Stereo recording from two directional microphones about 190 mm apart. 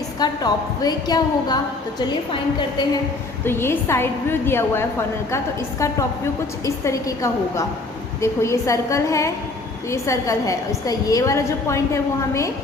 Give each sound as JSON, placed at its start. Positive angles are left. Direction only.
{"t": 0.2, "sound": "a woman's voice", "side_deg": 20}
{"t": 3.4, "sound": "a woman's voice", "side_deg": 10}
{"t": 6.7, "sound": "a woman's voice", "side_deg": 15}